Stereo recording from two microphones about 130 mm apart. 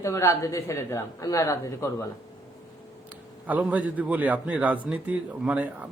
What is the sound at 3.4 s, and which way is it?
Speech, 10° right (ahead or behind).